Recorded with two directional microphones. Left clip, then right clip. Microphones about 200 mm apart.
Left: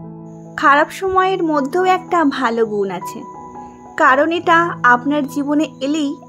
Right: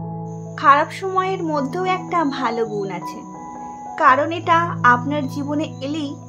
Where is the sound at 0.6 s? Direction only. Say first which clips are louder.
Left 2 dB; 30° left (ahead or behind).